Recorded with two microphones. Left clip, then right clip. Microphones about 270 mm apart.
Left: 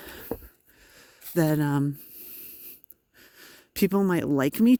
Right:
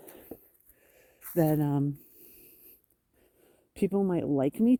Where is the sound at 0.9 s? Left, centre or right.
Left.